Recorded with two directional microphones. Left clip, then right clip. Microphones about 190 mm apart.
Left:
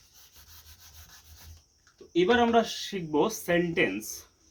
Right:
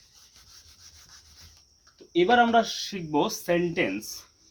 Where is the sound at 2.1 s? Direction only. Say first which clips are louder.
Right 3 dB; 45° right (ahead or behind).